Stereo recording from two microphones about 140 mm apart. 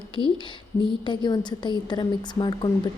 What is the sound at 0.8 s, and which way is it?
A woman's voice, 35° left (ahead or behind).